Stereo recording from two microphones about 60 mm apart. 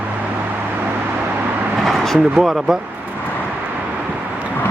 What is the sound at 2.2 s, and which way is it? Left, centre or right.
Speech, centre.